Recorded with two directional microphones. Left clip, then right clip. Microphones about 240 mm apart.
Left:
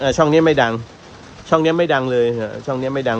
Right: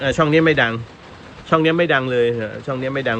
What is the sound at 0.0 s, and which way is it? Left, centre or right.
Speech, centre.